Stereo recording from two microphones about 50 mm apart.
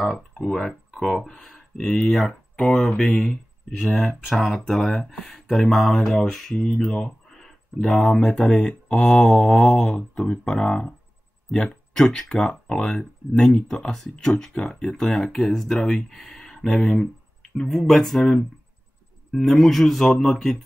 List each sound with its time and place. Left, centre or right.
0.5 s speech: centre
2.2 s speech: centre
6.5 s speech: centre
6.8 s a sound: centre
8.0 s speech: centre
11.5 s a sound: centre
12.0 s speech: centre